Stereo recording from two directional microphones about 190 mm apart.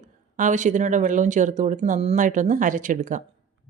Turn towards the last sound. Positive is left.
turn(degrees=-40)  # may be behind; listen again after turning